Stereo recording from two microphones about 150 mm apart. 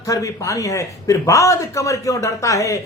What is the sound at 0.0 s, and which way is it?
Speech, 20° left (ahead or behind).